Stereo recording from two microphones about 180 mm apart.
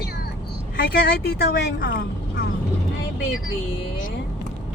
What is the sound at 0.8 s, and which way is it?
Speech, 60° left (ahead or behind).